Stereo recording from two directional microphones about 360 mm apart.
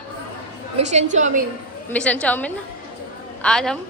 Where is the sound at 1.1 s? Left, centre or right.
Centre.